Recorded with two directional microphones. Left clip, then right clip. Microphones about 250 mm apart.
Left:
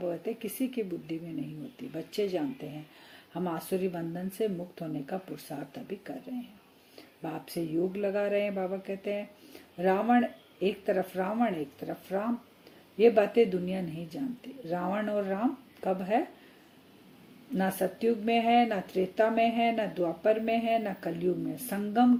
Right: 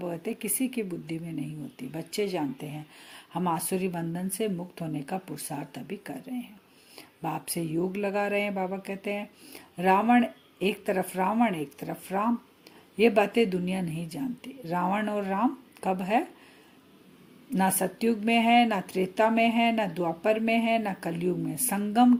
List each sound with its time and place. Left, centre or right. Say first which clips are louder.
0.0 s speech: even; right
7.2 s speech: right 3 dB; right
17.5 s speech: right 3 dB; right